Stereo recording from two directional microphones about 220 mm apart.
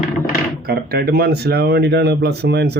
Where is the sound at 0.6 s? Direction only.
45° right (ahead or behind).